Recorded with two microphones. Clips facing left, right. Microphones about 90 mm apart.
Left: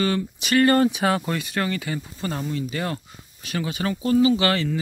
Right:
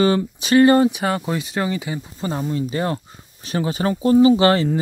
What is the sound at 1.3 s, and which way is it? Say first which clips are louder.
Speech: right 3 dB; 20° right (ahead or behind).